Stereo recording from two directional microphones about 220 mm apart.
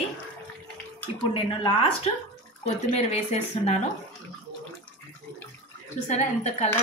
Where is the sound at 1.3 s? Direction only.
25° left (ahead or behind).